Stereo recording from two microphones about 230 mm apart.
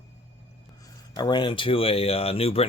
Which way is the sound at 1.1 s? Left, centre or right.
Centre.